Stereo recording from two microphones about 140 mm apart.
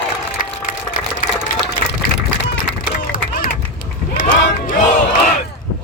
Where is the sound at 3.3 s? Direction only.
85° left.